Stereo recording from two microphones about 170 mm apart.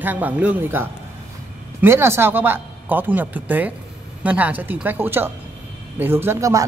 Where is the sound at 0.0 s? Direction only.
10° right (ahead or behind).